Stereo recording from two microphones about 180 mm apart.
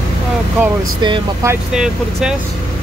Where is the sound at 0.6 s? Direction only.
10° right (ahead or behind).